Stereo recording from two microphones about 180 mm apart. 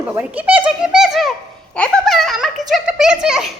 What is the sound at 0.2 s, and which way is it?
A child's voice, 10° right (ahead or behind).